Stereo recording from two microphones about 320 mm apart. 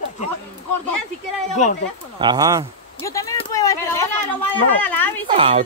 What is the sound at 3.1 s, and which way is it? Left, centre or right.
Speech, centre.